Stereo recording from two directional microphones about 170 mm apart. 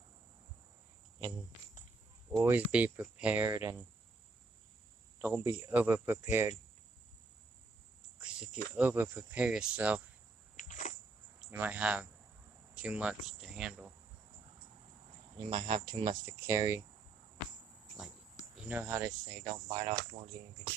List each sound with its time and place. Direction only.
2.4 s speech: 10° right (ahead or behind)
5.6 s speech: 10° right (ahead or behind)
8.2 s speech: 5° right (ahead or behind)
10.6 s a sound: 45° left (ahead or behind)
11.5 s speech: 10° right (ahead or behind)
15.4 s speech: 25° right (ahead or behind)
18.5 s speech: 10° right (ahead or behind)